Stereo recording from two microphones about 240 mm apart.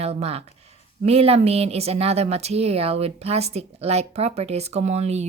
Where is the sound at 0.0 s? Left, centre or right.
Right.